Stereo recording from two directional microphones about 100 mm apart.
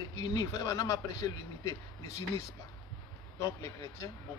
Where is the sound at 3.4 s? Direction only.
35° left (ahead or behind).